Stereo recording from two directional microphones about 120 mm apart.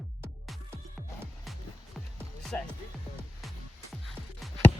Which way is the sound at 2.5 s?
15° left (ahead or behind).